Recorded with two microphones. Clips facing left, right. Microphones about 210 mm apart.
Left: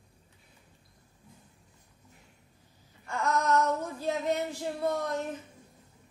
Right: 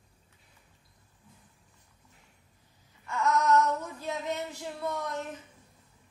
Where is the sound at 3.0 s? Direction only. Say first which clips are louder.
Right 2 dB; 35° left (ahead or behind).